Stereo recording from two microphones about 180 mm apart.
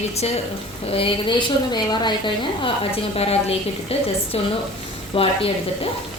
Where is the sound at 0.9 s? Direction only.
30° left (ahead or behind).